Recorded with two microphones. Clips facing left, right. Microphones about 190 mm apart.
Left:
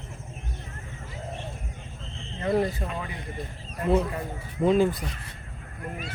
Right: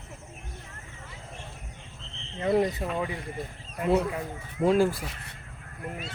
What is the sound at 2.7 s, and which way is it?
Speech, centre (ahead or behind).